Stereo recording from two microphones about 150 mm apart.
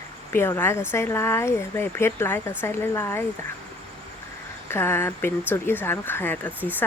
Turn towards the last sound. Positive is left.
turn(degrees=10)  # may be behind; listen again after turning